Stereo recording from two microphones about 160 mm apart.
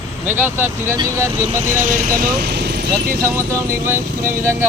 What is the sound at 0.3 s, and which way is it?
Speech, 15° right (ahead or behind).